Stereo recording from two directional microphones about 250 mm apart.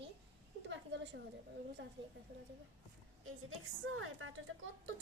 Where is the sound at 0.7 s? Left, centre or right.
Right.